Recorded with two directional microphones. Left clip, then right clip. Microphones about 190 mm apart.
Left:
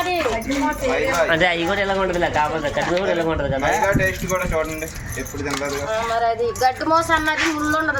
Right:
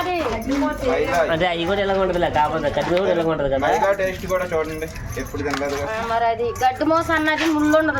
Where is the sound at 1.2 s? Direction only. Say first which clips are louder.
Left 2 dB; centre (ahead or behind); by 4.7 s 15° right (ahead or behind).